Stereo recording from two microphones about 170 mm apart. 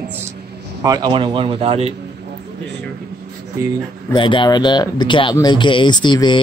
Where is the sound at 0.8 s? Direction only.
25° right (ahead or behind).